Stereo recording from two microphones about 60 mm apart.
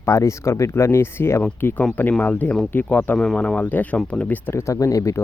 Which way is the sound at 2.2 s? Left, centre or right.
Left.